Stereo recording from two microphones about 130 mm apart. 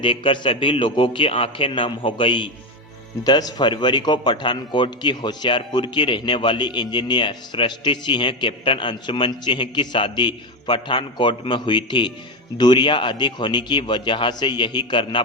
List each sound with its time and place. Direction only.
0.0 s a man's voice: 40° left (ahead or behind)